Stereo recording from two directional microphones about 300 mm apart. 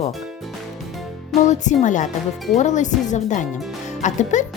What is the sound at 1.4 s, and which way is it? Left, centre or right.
Speech, left.